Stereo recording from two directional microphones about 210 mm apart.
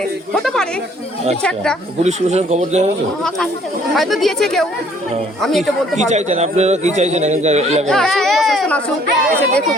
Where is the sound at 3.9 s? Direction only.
Centre (ahead or behind).